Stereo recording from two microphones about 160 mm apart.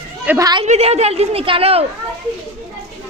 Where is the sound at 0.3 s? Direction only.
20° right (ahead or behind).